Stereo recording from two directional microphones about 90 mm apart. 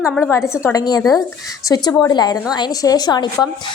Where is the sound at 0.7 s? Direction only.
45° left (ahead or behind).